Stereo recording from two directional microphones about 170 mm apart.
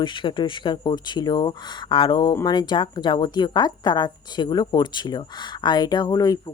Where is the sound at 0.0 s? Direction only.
30° left (ahead or behind).